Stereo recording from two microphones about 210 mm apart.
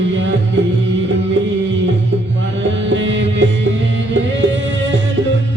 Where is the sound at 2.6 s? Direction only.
60° right (ahead or behind).